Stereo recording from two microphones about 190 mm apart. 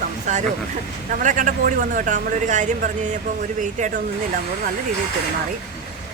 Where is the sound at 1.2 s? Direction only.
45° right (ahead or behind).